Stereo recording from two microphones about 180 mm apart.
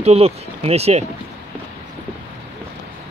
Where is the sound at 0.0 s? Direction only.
35° right (ahead or behind).